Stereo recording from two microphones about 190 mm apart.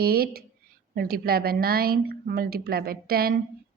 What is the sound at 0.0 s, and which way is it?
A woman's voice, 55° right (ahead or behind).